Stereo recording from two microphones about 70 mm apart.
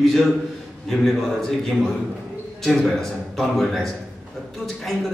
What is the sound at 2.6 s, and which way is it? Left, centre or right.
A man's voice, centre.